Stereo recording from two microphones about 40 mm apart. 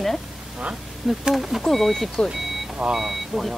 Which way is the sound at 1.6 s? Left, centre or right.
Centre.